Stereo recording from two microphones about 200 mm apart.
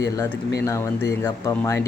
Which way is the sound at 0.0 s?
15° left (ahead or behind).